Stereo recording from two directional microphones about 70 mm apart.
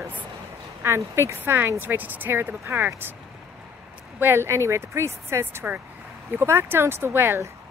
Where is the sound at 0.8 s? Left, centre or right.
Right.